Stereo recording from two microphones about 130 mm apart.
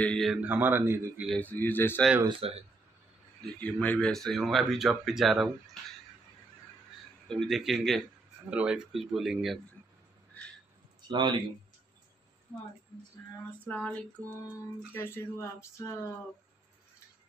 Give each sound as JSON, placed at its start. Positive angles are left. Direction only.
{"t": 0.0, "sound": "speech", "side_deg": 5}
{"t": 0.4, "sound": "a man's voice", "side_deg": -15}
{"t": 1.4, "sound": "speech", "side_deg": 15}
{"t": 2.2, "sound": "speech", "side_deg": -45}
{"t": 3.5, "sound": "speech", "side_deg": 10}
{"t": 7.2, "sound": "speech", "side_deg": 0}
{"t": 11.0, "sound": "speech", "side_deg": -35}
{"t": 13.7, "sound": "speech", "side_deg": 5}
{"t": 15.0, "sound": "speech", "side_deg": 20}